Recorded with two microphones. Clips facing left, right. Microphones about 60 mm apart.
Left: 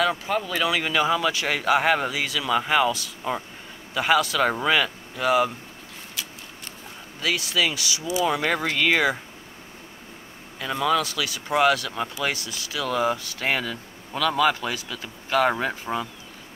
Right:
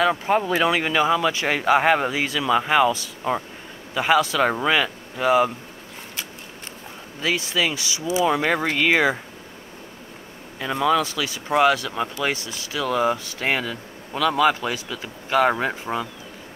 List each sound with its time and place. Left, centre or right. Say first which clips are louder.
0.5 s a man's voice: right 4 dB; right
2.5 s a man's voice: right 3 dB; centre
7.2 s speech: right 1 dB; centre
8.3 s a man's voice: right 3 dB; centre
10.6 s a man's voice: right 3 dB; centre
11.9 s speech: right 3 dB; centre
12.3 s speech: right 2 dB; right
12.8 s a man's voice: right 2 dB; centre